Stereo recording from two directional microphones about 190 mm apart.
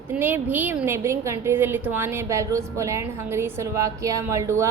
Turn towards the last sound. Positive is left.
turn(degrees=-15)  # may be behind; listen again after turning